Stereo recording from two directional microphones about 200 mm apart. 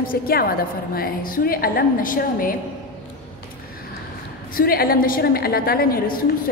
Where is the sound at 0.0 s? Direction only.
45° left (ahead or behind).